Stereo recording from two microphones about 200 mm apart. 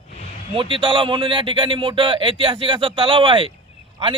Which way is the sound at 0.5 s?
25° right (ahead or behind).